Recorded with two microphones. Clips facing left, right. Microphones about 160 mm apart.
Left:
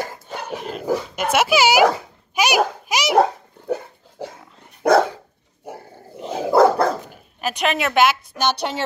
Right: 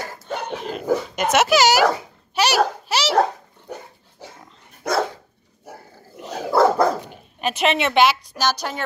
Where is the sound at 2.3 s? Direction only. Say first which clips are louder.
Even; 10° left (ahead or behind).